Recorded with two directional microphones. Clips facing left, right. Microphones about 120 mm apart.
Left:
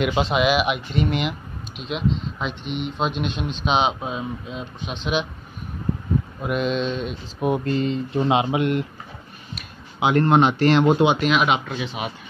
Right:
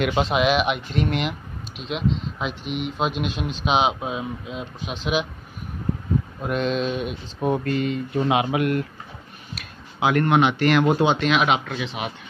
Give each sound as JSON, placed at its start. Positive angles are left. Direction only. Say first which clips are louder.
{"t": 0.0, "sound": "speech", "louder": "even", "side_deg": 0}
{"t": 6.4, "sound": "speech", "louder": "even", "side_deg": 5}
{"t": 7.3, "sound": "speech", "louder": "left 1 dB", "side_deg": 10}
{"t": 7.6, "sound": "speech", "louder": "left 1 dB", "side_deg": 30}
{"t": 9.9, "sound": "speech", "louder": "left 2 dB", "side_deg": 25}
{"t": 11.1, "sound": "speech", "louder": "even", "side_deg": 0}